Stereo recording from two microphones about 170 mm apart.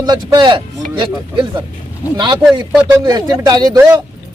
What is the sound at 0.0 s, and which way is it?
Speech, 25° right (ahead or behind).